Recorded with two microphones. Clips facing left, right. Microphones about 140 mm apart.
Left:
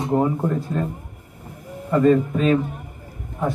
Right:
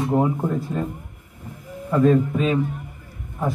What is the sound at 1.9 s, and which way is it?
Speech, centre (ahead or behind).